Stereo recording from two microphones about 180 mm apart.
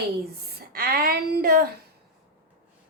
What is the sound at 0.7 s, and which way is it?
Speech, 55° right (ahead or behind).